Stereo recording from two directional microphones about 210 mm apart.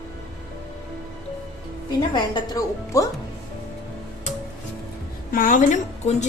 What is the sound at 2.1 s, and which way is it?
Speech, 20° left (ahead or behind).